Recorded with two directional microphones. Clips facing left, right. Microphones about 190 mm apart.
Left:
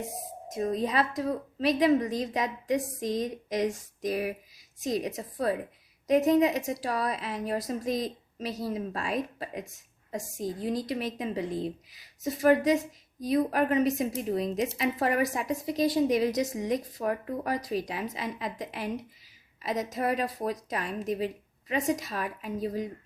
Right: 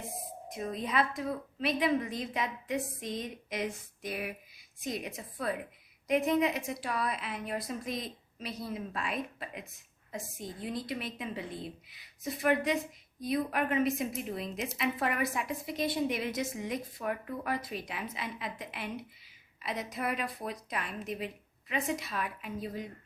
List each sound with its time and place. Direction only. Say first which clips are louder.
0.5 s a woman's voice: left 5 dB; 40° left (ahead or behind)